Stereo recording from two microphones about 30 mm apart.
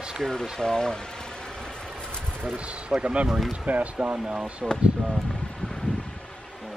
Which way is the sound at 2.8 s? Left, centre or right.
Right.